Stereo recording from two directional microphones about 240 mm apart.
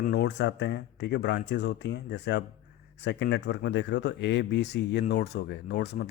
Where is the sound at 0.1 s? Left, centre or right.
Left.